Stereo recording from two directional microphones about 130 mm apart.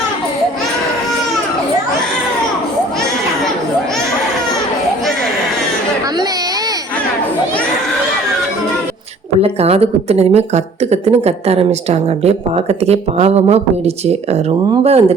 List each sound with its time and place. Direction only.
9.4 s a woman's voice: 50° right (ahead or behind)